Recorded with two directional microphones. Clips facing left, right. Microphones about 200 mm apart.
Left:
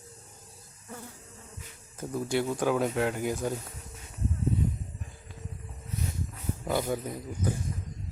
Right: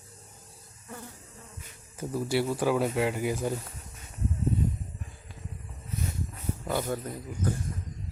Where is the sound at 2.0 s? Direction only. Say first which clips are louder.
Right 1 dB; 5° right (ahead or behind).